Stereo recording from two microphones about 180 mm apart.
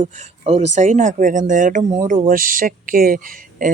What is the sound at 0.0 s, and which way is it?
Speech, 35° right (ahead or behind).